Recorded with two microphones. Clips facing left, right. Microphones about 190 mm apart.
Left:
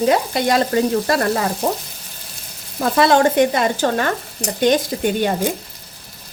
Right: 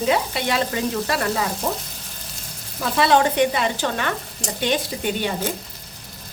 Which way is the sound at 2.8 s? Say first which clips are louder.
Left 4 dB; 50° left (ahead or behind).